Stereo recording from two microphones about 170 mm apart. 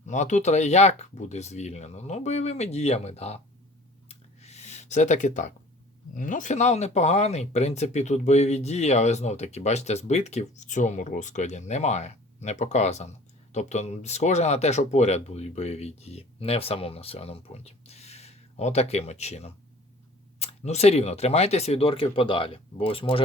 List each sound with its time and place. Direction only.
0.0 s speech: 45° left (ahead or behind)
4.1 s a sound: 40° left (ahead or behind)
6.1 s speech: 50° left (ahead or behind); by 23.2 s 30° left (ahead or behind)